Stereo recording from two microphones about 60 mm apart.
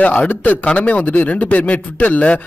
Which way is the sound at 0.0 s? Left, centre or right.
Left.